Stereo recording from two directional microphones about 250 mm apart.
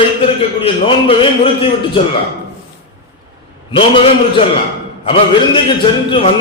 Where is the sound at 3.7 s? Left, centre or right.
Left.